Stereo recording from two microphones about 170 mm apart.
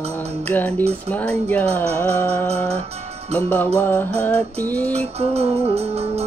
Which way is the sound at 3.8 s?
10° left (ahead or behind).